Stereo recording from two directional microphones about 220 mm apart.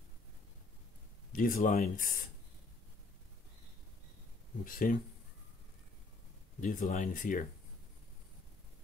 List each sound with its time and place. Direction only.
1.3 s speech: 40° left (ahead or behind)
4.6 s speech: 40° left (ahead or behind)
6.6 s speech: 35° left (ahead or behind)